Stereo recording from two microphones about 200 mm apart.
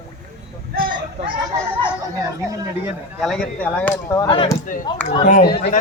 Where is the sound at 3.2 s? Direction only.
5° left (ahead or behind).